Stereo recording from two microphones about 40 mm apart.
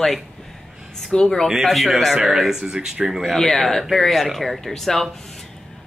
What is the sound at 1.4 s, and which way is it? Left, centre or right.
Speech, centre.